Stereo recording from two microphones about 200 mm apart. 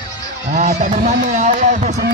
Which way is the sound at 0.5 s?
40° right (ahead or behind).